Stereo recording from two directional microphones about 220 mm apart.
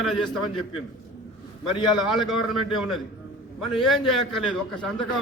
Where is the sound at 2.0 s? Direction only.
Centre (ahead or behind).